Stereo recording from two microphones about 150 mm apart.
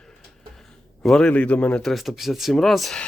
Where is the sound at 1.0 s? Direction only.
5° left (ahead or behind).